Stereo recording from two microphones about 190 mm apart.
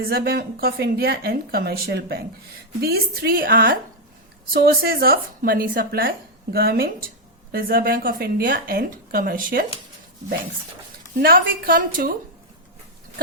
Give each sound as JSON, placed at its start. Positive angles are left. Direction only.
{"t": 0.0, "sound": "a woman's voice", "side_deg": -55}
{"t": 11.2, "sound": "a woman's voice", "side_deg": -50}